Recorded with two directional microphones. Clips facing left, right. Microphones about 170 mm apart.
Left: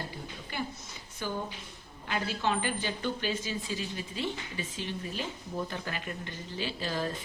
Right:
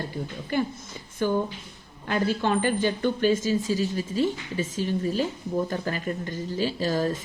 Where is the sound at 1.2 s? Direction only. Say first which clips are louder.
Right 10 dB; 50° right (ahead or behind).